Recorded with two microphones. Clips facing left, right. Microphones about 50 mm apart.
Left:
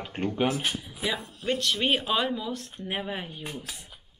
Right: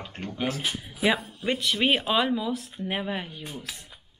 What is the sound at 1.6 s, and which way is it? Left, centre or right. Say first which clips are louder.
Speech: right 3 dB; centre.